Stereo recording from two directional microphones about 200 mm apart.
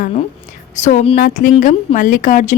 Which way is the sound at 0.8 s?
35° left (ahead or behind).